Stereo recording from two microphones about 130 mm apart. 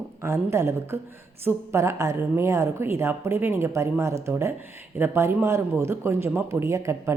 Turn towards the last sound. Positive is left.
turn(degrees=-20)  # may be behind; listen again after turning